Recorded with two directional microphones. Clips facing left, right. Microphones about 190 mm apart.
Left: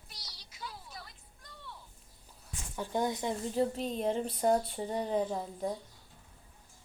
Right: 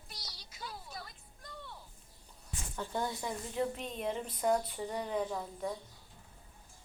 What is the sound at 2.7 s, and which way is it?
Speech, 15° left (ahead or behind).